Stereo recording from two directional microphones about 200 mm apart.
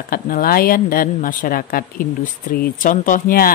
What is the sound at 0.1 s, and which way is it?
Speech, 45° left (ahead or behind).